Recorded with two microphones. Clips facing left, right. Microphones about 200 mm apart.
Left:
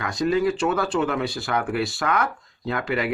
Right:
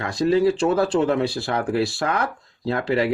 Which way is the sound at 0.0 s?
30° right (ahead or behind).